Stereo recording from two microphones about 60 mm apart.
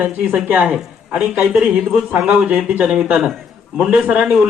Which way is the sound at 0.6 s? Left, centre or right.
Centre.